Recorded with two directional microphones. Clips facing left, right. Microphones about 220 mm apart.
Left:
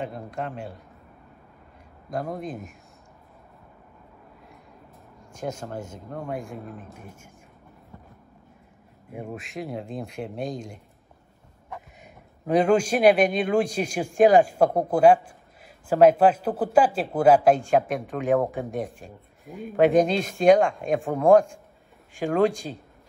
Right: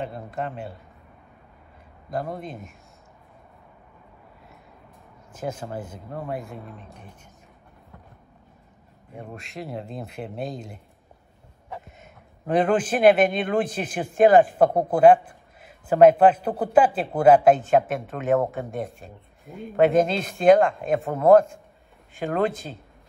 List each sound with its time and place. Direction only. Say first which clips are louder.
0.0 s speech: right 1 dB; centre (ahead or behind)
2.0 s speech: even; centre (ahead or behind)
5.3 s speech: right 1 dB; 5° right (ahead or behind)
9.1 s speech: left 3 dB; 10° left (ahead or behind)
12.4 s speech: left 1 dB; centre (ahead or behind)
15.0 s a sound: right 3 dB; 55° right (ahead or behind)
16.4 s speech: right 1 dB; 5° left (ahead or behind)